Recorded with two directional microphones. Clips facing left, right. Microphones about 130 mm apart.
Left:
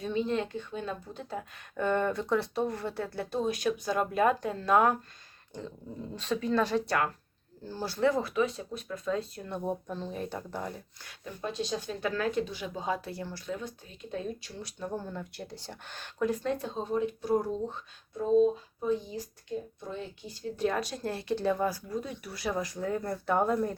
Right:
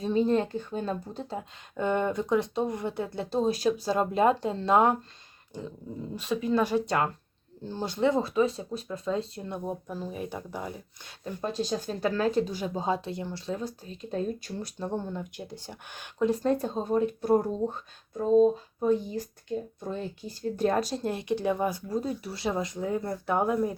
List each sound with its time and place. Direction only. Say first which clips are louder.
0.0 s speech: right 5 dB; 40° right (ahead or behind)
6.1 s speech: right 2 dB; 10° right (ahead or behind); by 9.5 s 25° right (ahead or behind)
9.6 s speech: left 2 dB; 5° right (ahead or behind)
11.3 s speech: right 3 dB; 40° right (ahead or behind)
14.8 s speech: right 3 dB; 25° right (ahead or behind)
16.4 s speech: right 5 dB; 40° right (ahead or behind)
19.8 s speech: right 5 dB; 40° right (ahead or behind)
21.0 s speech: right 2 dB; 20° right (ahead or behind)
21.8 s speech: right 5 dB; 35° right (ahead or behind); by 23.7 s 10° right (ahead or behind)